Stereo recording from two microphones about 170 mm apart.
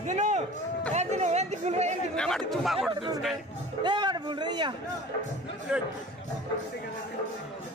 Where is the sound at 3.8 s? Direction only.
25° right (ahead or behind).